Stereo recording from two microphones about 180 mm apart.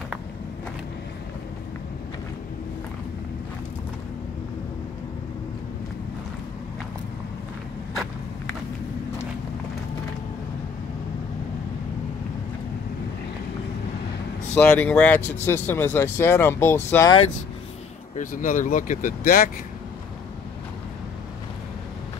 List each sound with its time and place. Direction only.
14.5 s speech: 10° left (ahead or behind)
18.1 s speech: 50° left (ahead or behind)